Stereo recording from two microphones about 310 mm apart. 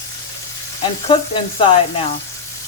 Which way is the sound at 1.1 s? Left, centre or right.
Centre.